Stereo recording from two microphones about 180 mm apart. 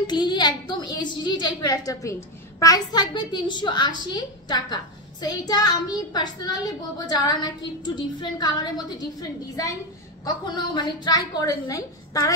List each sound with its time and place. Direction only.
0.0 s a woman's voice: 25° left (ahead or behind)
10.2 s a woman's voice: 25° left (ahead or behind)